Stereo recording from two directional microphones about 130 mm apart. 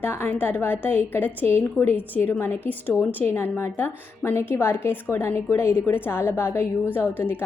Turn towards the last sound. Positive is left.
turn(degrees=15)  # may be behind; listen again after turning